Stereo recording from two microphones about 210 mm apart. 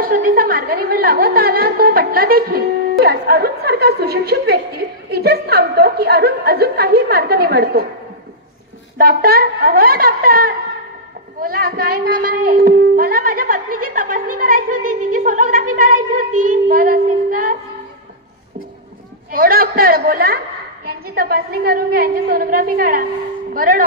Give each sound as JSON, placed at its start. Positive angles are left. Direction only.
{"t": 0.0, "sound": "a woman's voice", "side_deg": -40}
{"t": 8.9, "sound": "a woman's voice", "side_deg": -45}
{"t": 19.3, "sound": "a woman's voice", "side_deg": -45}